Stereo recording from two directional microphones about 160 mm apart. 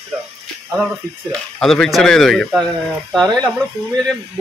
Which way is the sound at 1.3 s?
5° left (ahead or behind).